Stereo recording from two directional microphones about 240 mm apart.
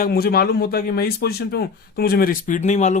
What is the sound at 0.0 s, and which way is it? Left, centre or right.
Speech, left.